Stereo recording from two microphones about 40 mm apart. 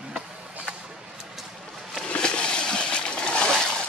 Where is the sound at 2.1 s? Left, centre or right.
Left.